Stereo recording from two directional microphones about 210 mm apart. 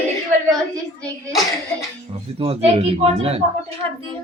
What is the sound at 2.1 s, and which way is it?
Speech, 30° right (ahead or behind).